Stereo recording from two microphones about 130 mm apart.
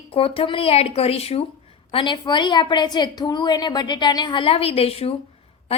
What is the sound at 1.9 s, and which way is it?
A woman's voice, 35° left (ahead or behind).